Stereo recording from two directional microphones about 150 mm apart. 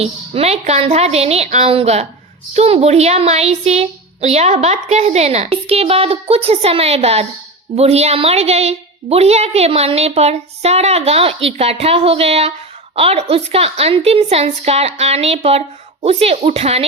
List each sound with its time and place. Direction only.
0.0 s a woman's voice: 45° right (ahead or behind)